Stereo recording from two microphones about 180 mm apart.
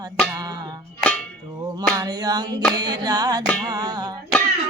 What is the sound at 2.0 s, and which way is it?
Music, 25° right (ahead or behind).